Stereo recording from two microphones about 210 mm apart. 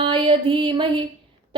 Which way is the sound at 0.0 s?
25° right (ahead or behind).